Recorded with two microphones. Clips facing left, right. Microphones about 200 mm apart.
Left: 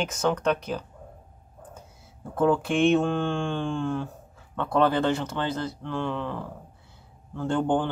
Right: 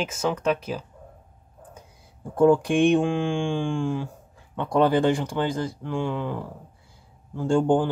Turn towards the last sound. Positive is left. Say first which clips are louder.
# right 4 dB
turn(degrees=-10)  # may be behind; listen again after turning